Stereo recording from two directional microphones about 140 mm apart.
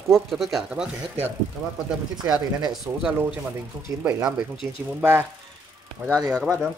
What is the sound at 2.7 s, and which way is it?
Speech, 5° right (ahead or behind).